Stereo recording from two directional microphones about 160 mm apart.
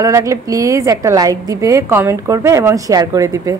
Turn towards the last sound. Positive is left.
turn(degrees=-20)  # may be behind; listen again after turning